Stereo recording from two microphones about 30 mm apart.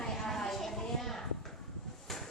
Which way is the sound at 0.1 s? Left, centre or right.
Centre.